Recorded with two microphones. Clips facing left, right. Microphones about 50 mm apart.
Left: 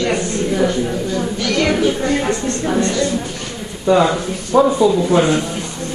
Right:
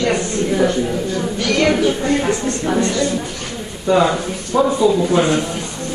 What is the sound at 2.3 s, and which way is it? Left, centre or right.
Speech, right.